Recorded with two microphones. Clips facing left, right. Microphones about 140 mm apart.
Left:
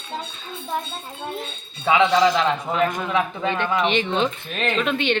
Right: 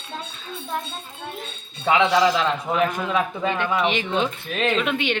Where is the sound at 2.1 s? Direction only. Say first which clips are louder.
Left 1 dB; 5° right (ahead or behind).